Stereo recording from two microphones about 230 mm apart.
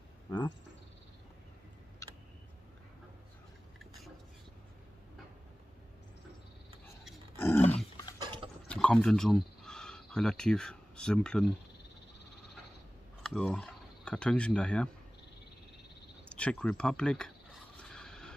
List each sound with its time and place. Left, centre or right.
0.3 s speech: centre
2.0 s tick: centre
7.3 s dog: centre
7.6 s dog: left
8.2 s pig: right
8.6 s speech: centre
13.3 s speech: centre
16.3 s speech: centre
17.8 s a sound: centre